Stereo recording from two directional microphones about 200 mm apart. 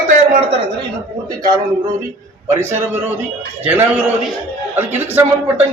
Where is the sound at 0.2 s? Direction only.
30° right (ahead or behind).